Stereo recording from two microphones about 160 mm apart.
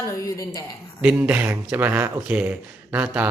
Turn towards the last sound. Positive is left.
turn(degrees=-10)  # may be behind; listen again after turning